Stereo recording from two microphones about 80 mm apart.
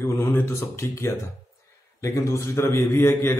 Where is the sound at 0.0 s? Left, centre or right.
Left.